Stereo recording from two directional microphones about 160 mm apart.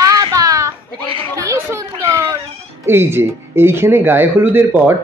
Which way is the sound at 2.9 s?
15° right (ahead or behind).